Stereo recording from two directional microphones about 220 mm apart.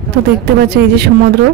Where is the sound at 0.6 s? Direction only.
45° right (ahead or behind).